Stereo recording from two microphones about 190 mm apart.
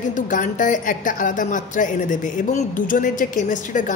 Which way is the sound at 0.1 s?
45° left (ahead or behind).